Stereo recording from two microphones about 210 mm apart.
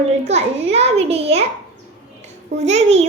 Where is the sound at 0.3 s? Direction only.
30° right (ahead or behind).